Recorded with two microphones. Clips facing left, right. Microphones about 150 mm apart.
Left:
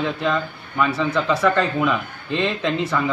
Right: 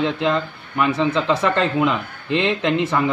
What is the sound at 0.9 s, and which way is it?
Speech, 20° right (ahead or behind).